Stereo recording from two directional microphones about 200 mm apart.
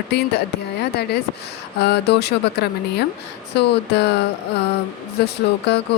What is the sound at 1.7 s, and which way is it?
Speech, 55° left (ahead or behind).